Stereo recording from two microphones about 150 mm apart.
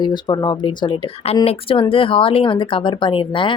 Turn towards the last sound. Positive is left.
turn(degrees=35)  # may be behind; listen again after turning